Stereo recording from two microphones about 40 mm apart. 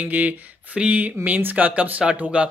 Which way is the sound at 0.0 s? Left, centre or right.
Right.